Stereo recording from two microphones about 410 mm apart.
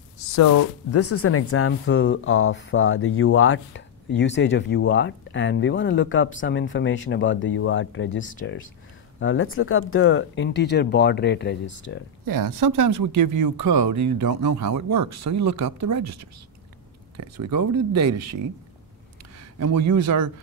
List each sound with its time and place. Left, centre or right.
0.3 s speech: left
12.3 s speech: right
19.6 s speech: right